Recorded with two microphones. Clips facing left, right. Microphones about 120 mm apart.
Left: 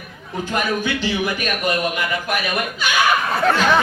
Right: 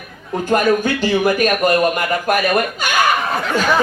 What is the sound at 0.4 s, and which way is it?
A man's voice, 50° right (ahead or behind).